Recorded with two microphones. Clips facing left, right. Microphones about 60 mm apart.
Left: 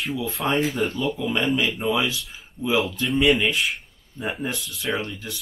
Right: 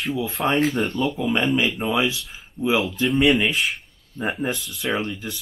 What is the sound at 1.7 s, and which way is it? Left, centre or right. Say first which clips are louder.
Speech: right 1 dB; centre.